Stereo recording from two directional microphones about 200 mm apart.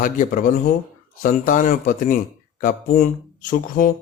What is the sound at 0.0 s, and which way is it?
Speech, 40° left (ahead or behind).